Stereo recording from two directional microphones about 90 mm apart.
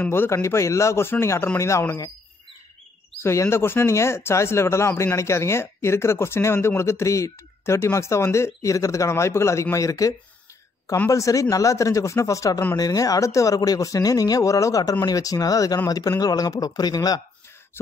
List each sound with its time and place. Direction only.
0.0 s speech: 25° left (ahead or behind)
3.2 s speech: 30° left (ahead or behind); by 17.2 s 45° left (ahead or behind)